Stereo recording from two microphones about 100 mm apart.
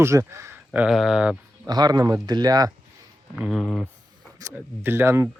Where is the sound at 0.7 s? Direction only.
15° right (ahead or behind).